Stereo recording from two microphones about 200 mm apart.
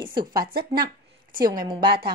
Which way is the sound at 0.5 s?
50° right (ahead or behind).